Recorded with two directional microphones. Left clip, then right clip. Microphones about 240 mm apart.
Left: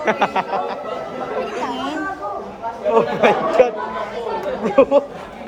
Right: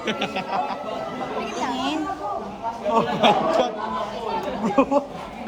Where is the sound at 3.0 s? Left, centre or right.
Right.